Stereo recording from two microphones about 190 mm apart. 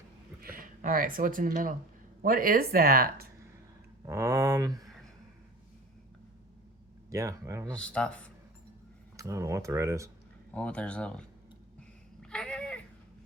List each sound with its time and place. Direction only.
0.4 s speech: 50° right (ahead or behind)
4.0 s speech: 15° right (ahead or behind)
7.1 s speech: 15° right (ahead or behind)
7.7 s speech: 5° left (ahead or behind)
9.1 s speech: 15° right (ahead or behind)
10.5 s speech: 5° left (ahead or behind)
11.8 s a sound: 5° left (ahead or behind)